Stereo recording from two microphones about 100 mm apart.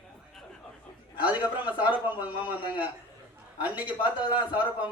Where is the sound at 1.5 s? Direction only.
15° right (ahead or behind).